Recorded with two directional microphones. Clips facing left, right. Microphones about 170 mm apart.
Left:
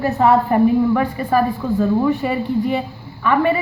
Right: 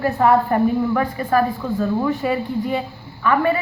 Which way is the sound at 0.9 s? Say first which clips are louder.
Left 1 dB; 10° left (ahead or behind).